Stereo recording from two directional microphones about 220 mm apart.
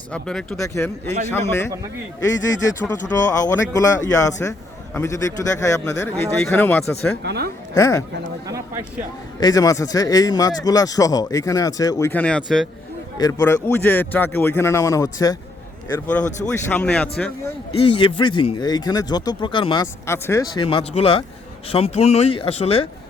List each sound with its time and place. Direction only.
0.1 s speech: 5° left (ahead or behind)
7.2 s speech: 50° right (ahead or behind)
7.7 s speech: 15° left (ahead or behind)
8.4 s speech: 15° right (ahead or behind)
9.4 s speech: 15° left (ahead or behind)
13.1 s speech: 15° left (ahead or behind)
17.7 s speech: 25° left (ahead or behind)
20.7 s speech: 25° left (ahead or behind)